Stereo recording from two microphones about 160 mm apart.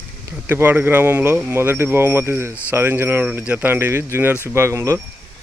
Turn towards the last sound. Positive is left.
turn(degrees=-15)  # may be behind; listen again after turning